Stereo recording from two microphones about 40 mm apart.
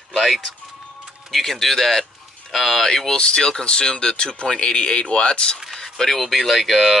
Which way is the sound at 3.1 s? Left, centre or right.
Left.